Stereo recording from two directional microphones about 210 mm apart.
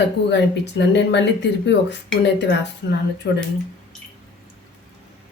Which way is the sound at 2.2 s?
55° left (ahead or behind).